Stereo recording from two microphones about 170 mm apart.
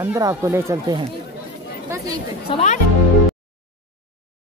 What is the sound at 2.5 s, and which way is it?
Speech, 40° left (ahead or behind).